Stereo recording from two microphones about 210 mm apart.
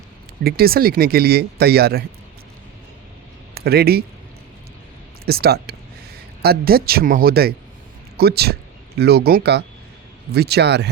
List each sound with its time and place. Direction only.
0.4 s speech: 45° right (ahead or behind)
3.5 s speech: 50° right (ahead or behind)
5.2 s speech: 50° right (ahead or behind)